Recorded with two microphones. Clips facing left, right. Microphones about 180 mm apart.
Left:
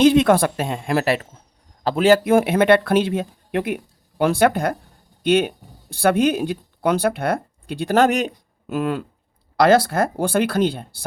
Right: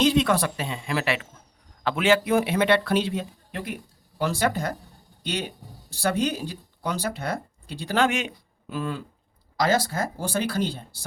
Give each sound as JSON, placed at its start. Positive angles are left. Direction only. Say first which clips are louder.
{"t": 0.0, "sound": "speech", "louder": "left 7 dB", "side_deg": 55}
{"t": 8.8, "sound": "speech", "louder": "left 7 dB", "side_deg": 60}